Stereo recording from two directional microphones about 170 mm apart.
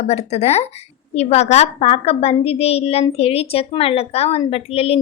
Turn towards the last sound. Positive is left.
turn(degrees=35)  # may be behind; listen again after turning